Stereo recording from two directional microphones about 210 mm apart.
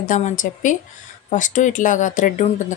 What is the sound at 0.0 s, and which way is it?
A woman's voice, 35° left (ahead or behind).